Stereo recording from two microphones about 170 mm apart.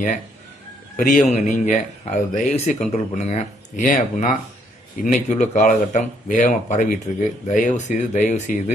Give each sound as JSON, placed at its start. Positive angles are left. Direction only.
{"t": 0.9, "sound": "speech", "side_deg": 50}